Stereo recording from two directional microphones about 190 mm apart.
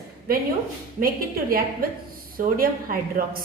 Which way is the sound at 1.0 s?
50° right (ahead or behind).